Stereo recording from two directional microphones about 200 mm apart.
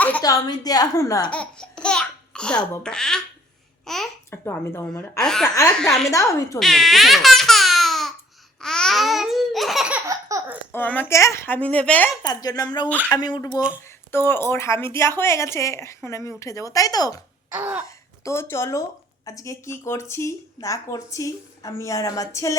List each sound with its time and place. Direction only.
0.2 s a woman's voice: 20° left (ahead or behind)
1.3 s speech: 5° left (ahead or behind)
3.8 s babbling: centre (ahead or behind)
4.3 s speech: 10° left (ahead or behind)
5.1 s babbling: centre (ahead or behind)
6.1 s speech: 15° left (ahead or behind)
6.6 s speech: centre (ahead or behind)
8.6 s babbling: 5° left (ahead or behind)
10.1 s laughter: 15° right (ahead or behind)
10.7 s speech: 10° left (ahead or behind)
12.2 s a woman's voice: 20° left (ahead or behind)
17.5 s laughter: 10° right (ahead or behind)
17.8 s speech: 15° left (ahead or behind)